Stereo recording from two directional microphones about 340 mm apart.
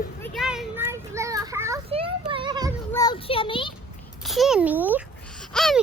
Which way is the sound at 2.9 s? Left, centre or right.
Centre.